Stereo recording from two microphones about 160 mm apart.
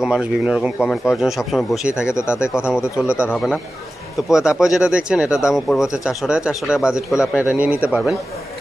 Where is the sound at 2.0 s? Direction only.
15° left (ahead or behind).